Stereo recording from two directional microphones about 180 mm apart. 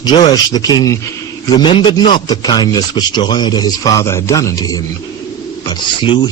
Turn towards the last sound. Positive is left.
turn(degrees=25)  # may be behind; listen again after turning